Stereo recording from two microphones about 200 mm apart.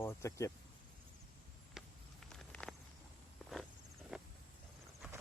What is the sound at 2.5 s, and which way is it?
Walk, 5° left (ahead or behind).